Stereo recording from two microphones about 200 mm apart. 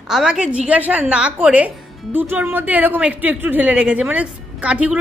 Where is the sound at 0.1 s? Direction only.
5° right (ahead or behind).